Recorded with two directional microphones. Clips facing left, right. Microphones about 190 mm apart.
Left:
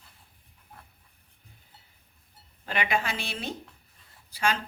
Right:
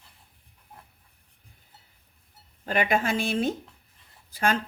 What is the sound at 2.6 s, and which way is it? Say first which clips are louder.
A woman's voice: right 4 dB; 45° right (ahead or behind).